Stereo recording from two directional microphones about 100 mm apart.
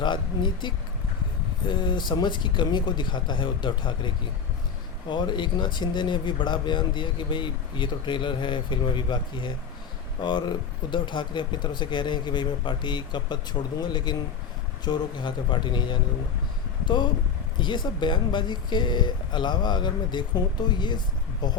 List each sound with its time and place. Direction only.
0.0 s speech: 50° left (ahead or behind)